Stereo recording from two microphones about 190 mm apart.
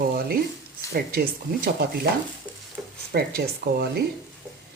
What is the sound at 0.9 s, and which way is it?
Speech, 55° right (ahead or behind).